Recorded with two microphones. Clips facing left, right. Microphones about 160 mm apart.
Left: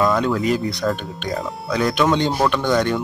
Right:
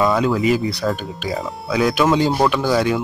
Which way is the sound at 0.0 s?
5° right (ahead or behind).